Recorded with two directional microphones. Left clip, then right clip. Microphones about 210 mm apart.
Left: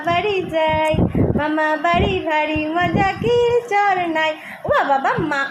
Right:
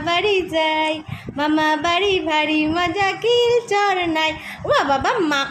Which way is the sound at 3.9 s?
20° right (ahead or behind).